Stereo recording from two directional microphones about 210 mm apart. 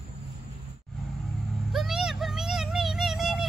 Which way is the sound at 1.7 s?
Centre (ahead or behind).